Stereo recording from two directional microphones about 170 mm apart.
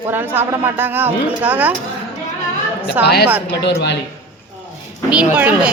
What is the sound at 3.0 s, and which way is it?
Speech, 85° left.